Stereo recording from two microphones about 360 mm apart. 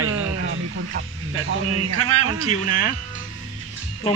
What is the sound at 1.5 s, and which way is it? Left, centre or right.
Speech, right.